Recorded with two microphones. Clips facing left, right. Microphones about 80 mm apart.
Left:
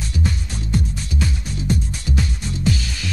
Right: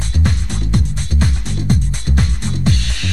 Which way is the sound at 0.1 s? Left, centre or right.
Right.